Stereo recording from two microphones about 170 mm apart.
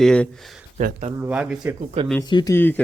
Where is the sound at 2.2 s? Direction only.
25° left (ahead or behind).